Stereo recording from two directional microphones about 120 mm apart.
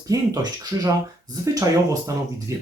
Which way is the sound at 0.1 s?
30° right (ahead or behind).